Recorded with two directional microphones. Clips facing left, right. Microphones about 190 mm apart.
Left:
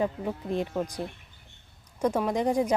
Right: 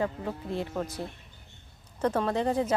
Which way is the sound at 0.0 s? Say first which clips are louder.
Left 2 dB; 15° left (ahead or behind).